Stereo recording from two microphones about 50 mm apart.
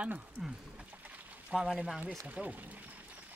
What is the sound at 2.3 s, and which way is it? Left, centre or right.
Pour, right.